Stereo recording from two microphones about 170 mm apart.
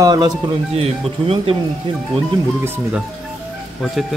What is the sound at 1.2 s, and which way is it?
Speech, 35° right (ahead or behind).